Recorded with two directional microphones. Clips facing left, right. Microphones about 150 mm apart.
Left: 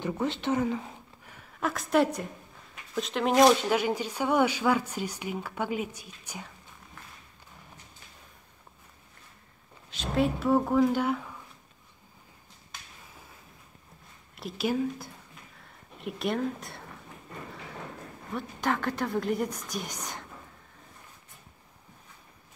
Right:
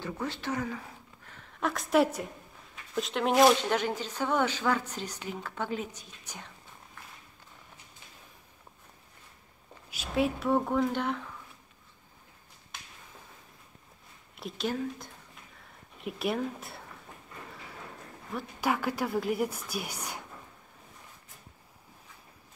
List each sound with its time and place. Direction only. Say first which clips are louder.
0.0 s speech: left 5 dB; 20° left (ahead or behind)
1.2 s a sound: even; 10° left (ahead or behind)
2.9 s speech: left 1 dB; centre (ahead or behind)
3.7 s speech: left 3 dB; 10° left (ahead or behind)
9.8 s speech: left 2 dB; 5° right (ahead or behind)
14.3 s speech: left 4 dB; 5° left (ahead or behind)
18.3 s speech: left 1 dB; 10° right (ahead or behind)